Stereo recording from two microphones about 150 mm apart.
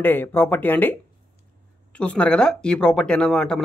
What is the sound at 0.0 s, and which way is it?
Speech, 15° left (ahead or behind).